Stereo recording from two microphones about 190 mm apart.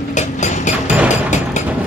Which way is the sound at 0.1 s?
40° left (ahead or behind).